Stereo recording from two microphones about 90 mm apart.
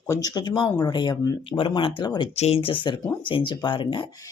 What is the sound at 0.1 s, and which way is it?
Speech, 45° left (ahead or behind).